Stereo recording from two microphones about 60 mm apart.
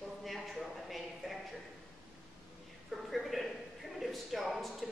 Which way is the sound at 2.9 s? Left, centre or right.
Centre.